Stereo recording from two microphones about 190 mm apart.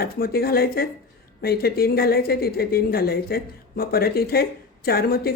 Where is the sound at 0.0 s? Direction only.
55° left (ahead or behind).